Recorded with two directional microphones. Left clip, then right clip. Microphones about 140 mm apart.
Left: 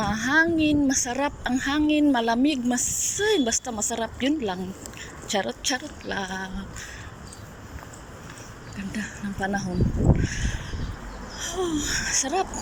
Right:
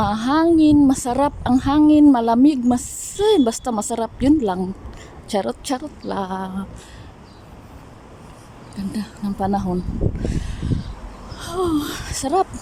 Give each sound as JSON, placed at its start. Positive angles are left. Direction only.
{"t": 0.0, "sound": "a woman's voice", "side_deg": -30}
{"t": 8.9, "sound": "a woman's voice", "side_deg": -30}